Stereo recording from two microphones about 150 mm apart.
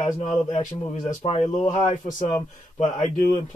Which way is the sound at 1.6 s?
55° left (ahead or behind).